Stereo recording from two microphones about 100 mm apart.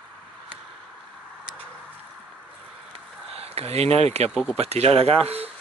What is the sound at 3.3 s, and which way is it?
Speech, 85° right.